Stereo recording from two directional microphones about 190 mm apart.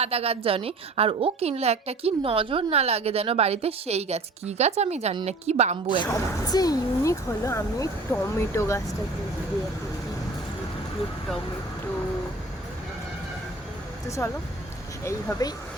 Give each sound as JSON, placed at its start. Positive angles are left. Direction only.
{"t": 0.0, "sound": "a woman's voice", "side_deg": -30}
{"t": 6.1, "sound": "speech", "side_deg": 20}
{"t": 15.0, "sound": "speech", "side_deg": 15}